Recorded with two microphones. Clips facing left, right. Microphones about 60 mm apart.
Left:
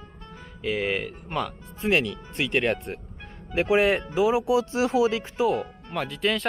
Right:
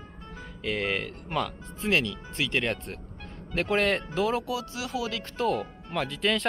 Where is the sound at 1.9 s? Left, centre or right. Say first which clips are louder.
Left 3 dB; centre.